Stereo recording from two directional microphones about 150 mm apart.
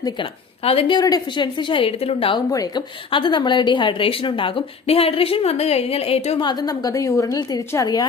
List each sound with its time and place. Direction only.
0.6 s speech: 40° left (ahead or behind)
0.9 s speech: 25° left (ahead or behind)
2.5 s a woman's voice: 25° left (ahead or behind); by 6.4 s 40° left (ahead or behind)
6.4 s a woman's voice: 25° left (ahead or behind)